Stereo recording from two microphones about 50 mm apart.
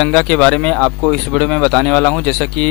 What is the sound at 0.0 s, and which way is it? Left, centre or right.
Speech, centre.